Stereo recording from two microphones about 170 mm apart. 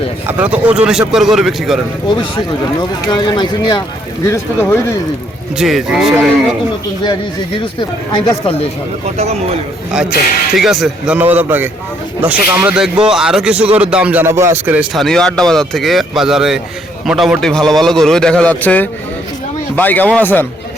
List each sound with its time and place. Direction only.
0.3 s speech: 10° right (ahead or behind)
3.1 s speech: 25° left (ahead or behind)
5.5 s speech: centre (ahead or behind)
7.6 s speech: 25° left (ahead or behind)
9.1 s speech: 40° right (ahead or behind)
10.5 s a man's voice: centre (ahead or behind)